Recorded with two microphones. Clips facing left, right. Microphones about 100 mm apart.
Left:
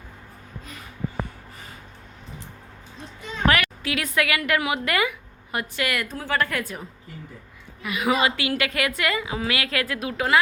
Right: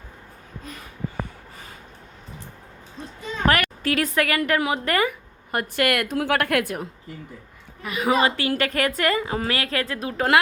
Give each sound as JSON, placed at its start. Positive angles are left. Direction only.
{"t": 3.4, "sound": "a woman's voice", "side_deg": -45}
{"t": 7.8, "sound": "a woman's voice", "side_deg": -35}